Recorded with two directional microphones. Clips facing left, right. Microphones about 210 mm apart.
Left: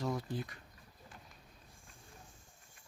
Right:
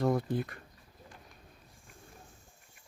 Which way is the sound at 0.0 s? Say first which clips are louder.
Right 8 dB; 55° right (ahead or behind).